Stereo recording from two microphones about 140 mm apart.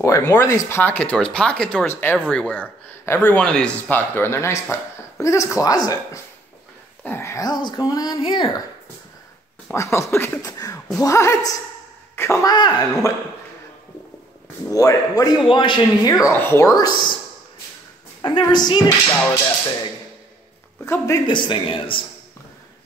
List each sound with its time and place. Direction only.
0.0 s speech: 20° left (ahead or behind)
9.7 s speech: 20° left (ahead or behind)
14.7 s speech: 25° left (ahead or behind)
18.2 s speech: 35° left (ahead or behind)
20.8 s speech: 20° left (ahead or behind)
21.3 s speech: 35° left (ahead or behind)